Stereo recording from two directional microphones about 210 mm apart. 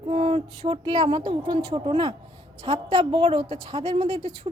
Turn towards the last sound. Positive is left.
turn(degrees=-30)  # may be behind; listen again after turning